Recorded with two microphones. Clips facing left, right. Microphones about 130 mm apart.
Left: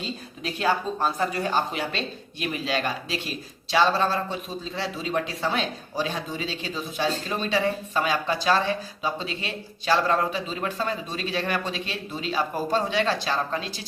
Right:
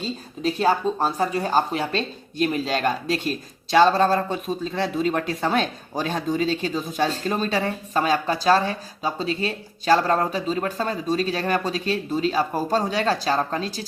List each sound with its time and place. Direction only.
0.0 s speech: 35° right (ahead or behind)